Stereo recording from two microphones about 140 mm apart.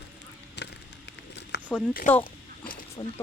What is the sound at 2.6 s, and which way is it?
Snake, 90° left.